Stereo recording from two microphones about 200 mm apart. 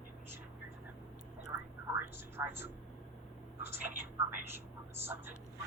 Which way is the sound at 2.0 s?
10° right (ahead or behind).